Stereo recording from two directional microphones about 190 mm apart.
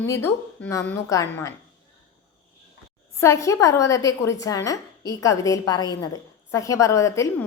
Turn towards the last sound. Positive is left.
turn(degrees=15)  # may be behind; listen again after turning